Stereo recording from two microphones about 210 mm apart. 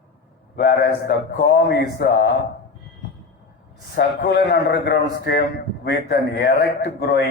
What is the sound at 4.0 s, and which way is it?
A man's voice, 55° left (ahead or behind).